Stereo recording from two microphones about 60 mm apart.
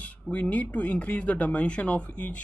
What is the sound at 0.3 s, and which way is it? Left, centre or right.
Speech, left.